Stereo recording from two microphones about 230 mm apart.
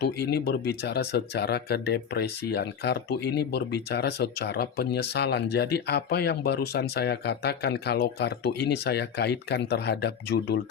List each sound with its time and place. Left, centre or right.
0.0 s speech: left